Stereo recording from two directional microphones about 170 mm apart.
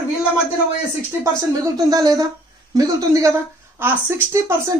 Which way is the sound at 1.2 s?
20° right (ahead or behind).